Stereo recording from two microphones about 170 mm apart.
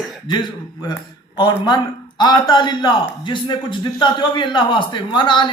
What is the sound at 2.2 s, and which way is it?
A man's voice, 25° left (ahead or behind).